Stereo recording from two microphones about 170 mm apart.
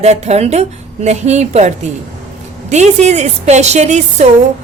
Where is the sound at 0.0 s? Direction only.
40° right (ahead or behind).